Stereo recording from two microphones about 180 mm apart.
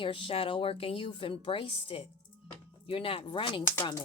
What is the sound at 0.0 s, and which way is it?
A woman's voice, 30° left (ahead or behind).